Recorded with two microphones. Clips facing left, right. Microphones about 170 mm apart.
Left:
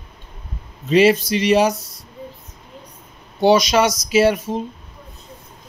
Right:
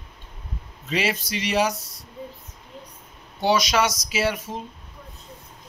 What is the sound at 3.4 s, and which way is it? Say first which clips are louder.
Speech: left 7 dB; 25° left (ahead or behind).